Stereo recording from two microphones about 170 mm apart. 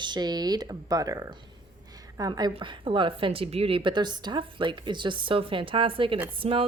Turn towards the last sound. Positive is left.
turn(degrees=-30)  # may be behind; listen again after turning